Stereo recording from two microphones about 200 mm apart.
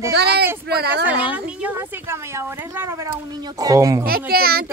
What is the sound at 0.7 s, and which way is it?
Speech, 50° right (ahead or behind).